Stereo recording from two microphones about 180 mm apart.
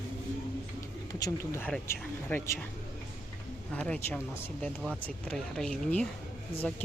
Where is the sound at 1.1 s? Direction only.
15° left (ahead or behind).